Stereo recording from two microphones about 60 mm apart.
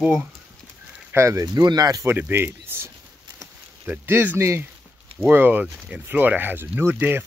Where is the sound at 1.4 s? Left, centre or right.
Right.